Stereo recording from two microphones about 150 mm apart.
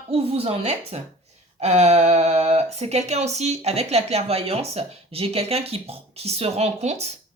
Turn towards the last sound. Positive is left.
turn(degrees=-45)  # may be behind; listen again after turning